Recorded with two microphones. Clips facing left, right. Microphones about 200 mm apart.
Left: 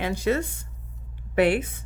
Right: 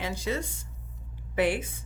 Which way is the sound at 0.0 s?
60° left (ahead or behind).